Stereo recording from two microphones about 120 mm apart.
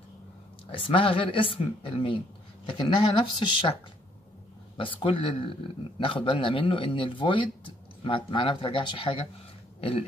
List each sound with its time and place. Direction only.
0.7 s speech: 50° left (ahead or behind)
4.7 s speech: 45° left (ahead or behind)
9.8 s a sound: 55° left (ahead or behind)